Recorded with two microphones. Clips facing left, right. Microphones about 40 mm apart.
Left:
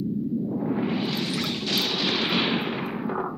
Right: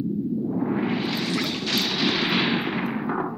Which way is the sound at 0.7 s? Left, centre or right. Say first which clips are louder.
Right 1 dB; centre.